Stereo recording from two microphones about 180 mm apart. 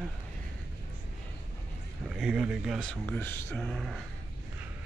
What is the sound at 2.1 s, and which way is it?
Speech, 5° right (ahead or behind).